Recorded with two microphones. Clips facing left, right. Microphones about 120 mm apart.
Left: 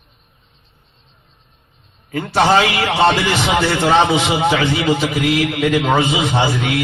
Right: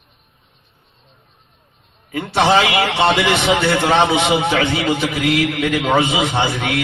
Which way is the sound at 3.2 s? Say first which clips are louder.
Right 1 dB; 60° right (ahead or behind).